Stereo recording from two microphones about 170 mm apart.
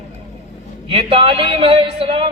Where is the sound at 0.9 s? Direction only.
35° right (ahead or behind).